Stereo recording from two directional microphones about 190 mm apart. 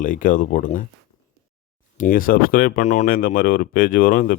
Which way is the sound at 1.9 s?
45° left (ahead or behind).